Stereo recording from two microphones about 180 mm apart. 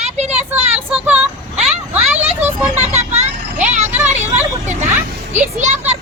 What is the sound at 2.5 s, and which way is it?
Vehicle, 35° right (ahead or behind).